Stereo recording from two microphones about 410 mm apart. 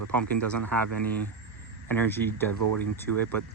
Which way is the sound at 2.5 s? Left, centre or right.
Right.